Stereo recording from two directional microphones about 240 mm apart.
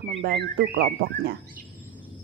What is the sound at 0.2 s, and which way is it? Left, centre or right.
Speech, right.